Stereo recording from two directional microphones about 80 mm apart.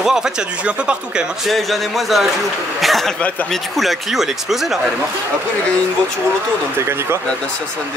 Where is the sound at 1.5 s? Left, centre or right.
Centre.